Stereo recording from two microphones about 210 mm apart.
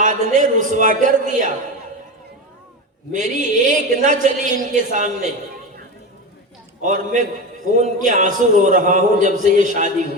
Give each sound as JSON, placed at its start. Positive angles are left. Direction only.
{"t": 0.0, "sound": "a man's voice", "side_deg": -35}
{"t": 3.1, "sound": "a man's voice", "side_deg": -35}
{"t": 6.8, "sound": "a man's voice", "side_deg": -35}